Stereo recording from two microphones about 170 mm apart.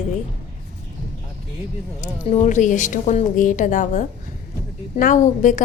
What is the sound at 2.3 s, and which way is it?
A woman's voice, 45° left (ahead or behind).